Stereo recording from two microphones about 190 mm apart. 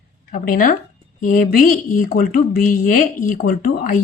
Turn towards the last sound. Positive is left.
turn(degrees=45)  # may be behind; listen again after turning